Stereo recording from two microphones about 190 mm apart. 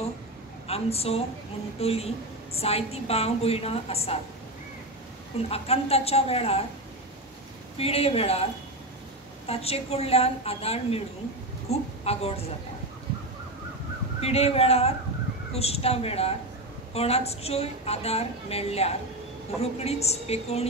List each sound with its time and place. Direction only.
0.7 s a woman's voice: 30° left (ahead or behind)
5.5 s a woman's voice: 30° left (ahead or behind)
7.7 s a woman's voice: 30° left (ahead or behind)
9.5 s a woman's voice: 30° left (ahead or behind)
14.2 s a woman's voice: 30° left (ahead or behind)